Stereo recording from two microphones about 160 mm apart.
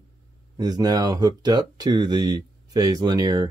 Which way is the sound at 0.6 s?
25° right (ahead or behind).